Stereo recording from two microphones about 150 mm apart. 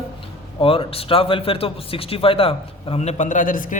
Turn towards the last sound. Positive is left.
turn(degrees=65)  # may be behind; listen again after turning